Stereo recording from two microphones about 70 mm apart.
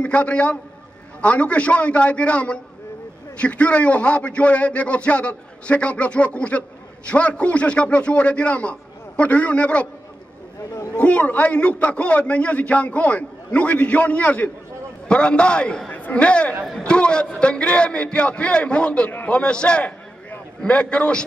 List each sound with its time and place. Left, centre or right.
0.0 s a man's voice: centre
11.0 s a man's voice: left